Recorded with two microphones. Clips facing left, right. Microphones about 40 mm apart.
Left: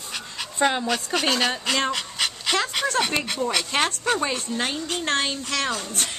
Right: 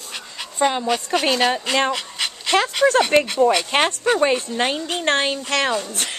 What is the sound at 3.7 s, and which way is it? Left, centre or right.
Speech, right.